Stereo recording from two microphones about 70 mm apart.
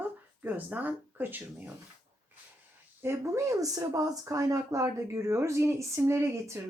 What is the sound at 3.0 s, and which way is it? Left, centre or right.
Speech, right.